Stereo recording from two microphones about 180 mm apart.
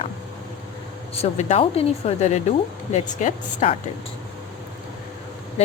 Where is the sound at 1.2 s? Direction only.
35° left (ahead or behind).